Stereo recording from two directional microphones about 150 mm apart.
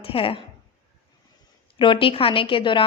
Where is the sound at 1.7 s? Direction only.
35° left (ahead or behind).